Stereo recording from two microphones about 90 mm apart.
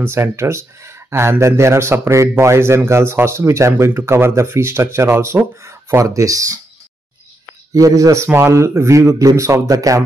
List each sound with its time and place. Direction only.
0.0 s speech: 30° right (ahead or behind)
7.7 s a man's voice: 40° right (ahead or behind)